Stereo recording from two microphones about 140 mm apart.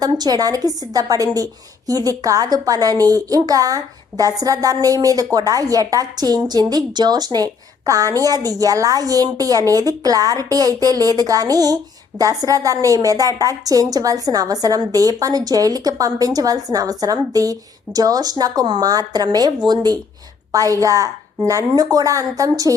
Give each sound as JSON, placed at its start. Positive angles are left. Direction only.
{"t": 0.0, "sound": "a woman's voice", "side_deg": -30}